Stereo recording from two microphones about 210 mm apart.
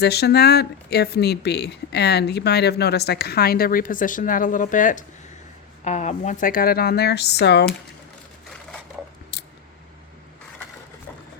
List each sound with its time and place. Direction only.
0.0 s speech: 50° left (ahead or behind)
9.3 s scissors: 50° left (ahead or behind)